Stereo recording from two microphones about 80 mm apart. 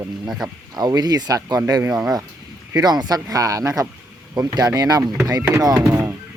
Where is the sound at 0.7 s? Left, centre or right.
Right.